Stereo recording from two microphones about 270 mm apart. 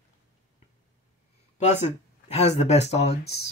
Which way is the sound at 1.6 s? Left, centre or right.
Left.